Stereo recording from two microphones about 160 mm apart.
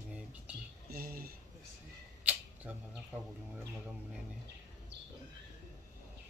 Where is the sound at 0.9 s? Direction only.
65° right (ahead or behind).